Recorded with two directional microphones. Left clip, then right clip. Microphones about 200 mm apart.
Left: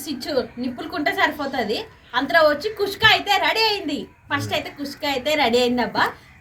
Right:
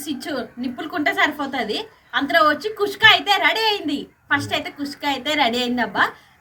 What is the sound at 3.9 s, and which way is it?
Speech, centre (ahead or behind).